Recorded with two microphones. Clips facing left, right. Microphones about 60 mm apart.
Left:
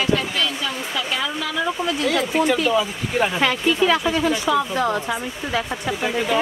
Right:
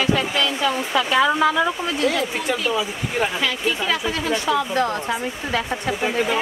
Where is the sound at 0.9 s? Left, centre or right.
Right.